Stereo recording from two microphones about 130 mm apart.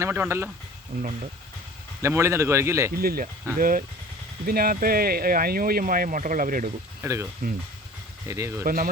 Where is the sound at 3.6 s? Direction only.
90° right.